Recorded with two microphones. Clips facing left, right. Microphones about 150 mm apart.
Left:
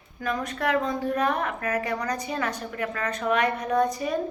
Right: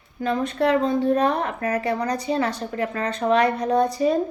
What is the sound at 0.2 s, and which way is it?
A woman's voice, 25° right (ahead or behind).